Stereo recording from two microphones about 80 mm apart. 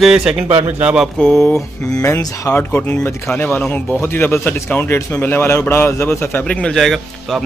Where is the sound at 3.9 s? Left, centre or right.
Left.